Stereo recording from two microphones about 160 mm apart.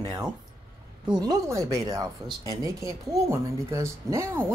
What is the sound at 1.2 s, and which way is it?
A man's voice, 25° right (ahead or behind).